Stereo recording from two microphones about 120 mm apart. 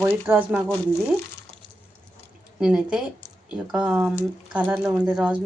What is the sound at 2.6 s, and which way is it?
A woman's voice, 10° right (ahead or behind).